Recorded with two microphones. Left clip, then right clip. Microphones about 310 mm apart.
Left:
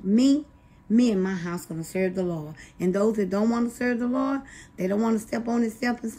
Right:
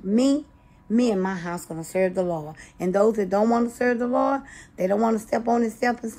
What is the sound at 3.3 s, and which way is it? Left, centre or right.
A woman's voice, centre.